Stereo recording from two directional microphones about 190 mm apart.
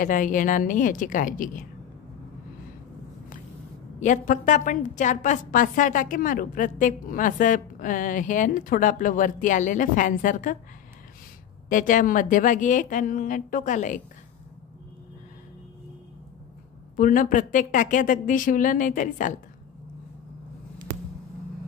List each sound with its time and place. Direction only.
0.0 s a woman's voice: 45° left (ahead or behind)
4.0 s a woman's voice: 40° left (ahead or behind)
11.7 s a woman's voice: 45° left (ahead or behind)
16.9 s a woman's voice: 45° left (ahead or behind)